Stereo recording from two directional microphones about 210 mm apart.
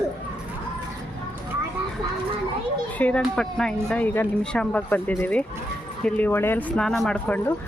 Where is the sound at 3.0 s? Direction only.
5° left (ahead or behind).